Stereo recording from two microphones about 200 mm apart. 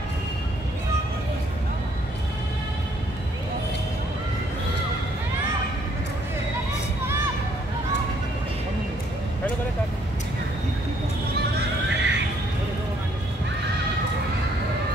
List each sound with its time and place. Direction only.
11.3 s neigh: 60° right (ahead or behind)